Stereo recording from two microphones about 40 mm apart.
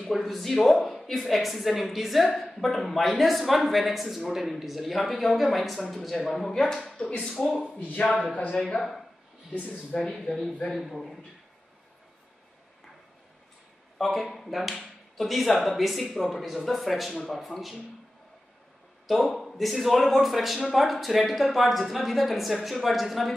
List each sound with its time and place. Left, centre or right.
0.0 s speech: centre
8.7 s speech: centre
9.5 s speech: left
9.9 s speech: centre
10.7 s speech: centre
13.9 s speech: centre
19.0 s speech: centre